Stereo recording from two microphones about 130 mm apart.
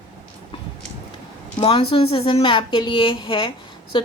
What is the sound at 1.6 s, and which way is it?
A woman's voice, 45° left (ahead or behind).